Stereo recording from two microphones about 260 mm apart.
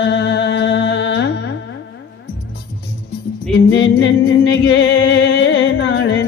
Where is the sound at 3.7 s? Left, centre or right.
Left.